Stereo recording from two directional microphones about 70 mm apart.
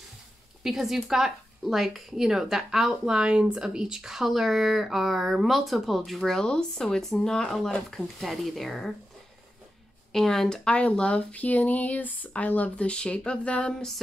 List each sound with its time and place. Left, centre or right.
0.7 s speech: centre
10.1 s speech: centre